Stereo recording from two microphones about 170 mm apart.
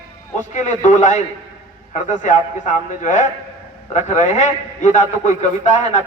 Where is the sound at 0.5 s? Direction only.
45° left (ahead or behind).